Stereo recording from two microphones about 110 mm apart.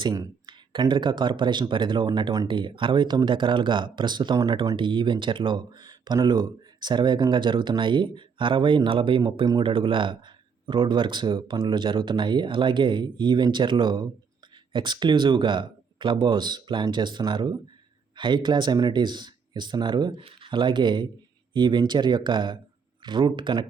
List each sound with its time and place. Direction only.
0.0 s speech: 40° right (ahead or behind)
4.8 s speech: 45° right (ahead or behind)